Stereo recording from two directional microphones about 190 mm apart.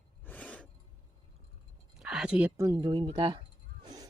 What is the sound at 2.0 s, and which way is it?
Speech, 5° right (ahead or behind).